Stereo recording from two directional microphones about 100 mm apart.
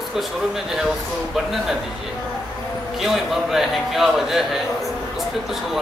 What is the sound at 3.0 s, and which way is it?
A man's voice, centre (ahead or behind).